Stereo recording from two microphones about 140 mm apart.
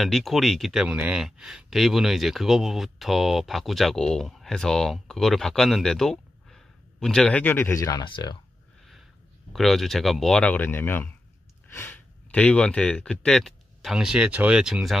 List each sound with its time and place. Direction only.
0.0 s speech: centre (ahead or behind); by 8.0 s 20° left (ahead or behind)
8.0 s speech: 35° left (ahead or behind)
9.5 s speech: centre (ahead or behind)